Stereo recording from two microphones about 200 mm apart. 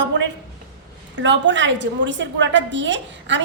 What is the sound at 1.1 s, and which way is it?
A woman's voice, 65° right (ahead or behind).